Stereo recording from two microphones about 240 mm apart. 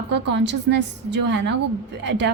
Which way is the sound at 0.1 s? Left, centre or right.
Right.